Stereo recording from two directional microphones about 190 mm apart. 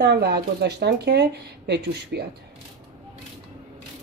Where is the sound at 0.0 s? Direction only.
60° right (ahead or behind).